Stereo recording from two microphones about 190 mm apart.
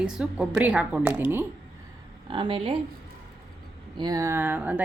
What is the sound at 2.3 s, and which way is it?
Speech, 25° right (ahead or behind).